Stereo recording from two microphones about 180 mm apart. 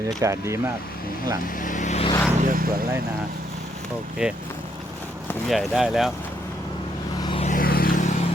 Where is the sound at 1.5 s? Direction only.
50° left (ahead or behind).